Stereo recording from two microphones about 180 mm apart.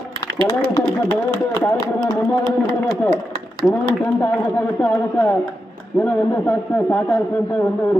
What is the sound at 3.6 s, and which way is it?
A man's voice, 10° left (ahead or behind).